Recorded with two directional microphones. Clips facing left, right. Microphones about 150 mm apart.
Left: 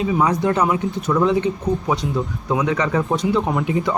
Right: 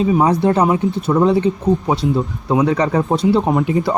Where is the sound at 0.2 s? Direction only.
30° right (ahead or behind).